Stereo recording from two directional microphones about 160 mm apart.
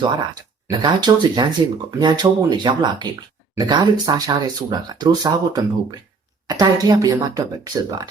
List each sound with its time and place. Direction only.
0.7 s speech: 25° right (ahead or behind)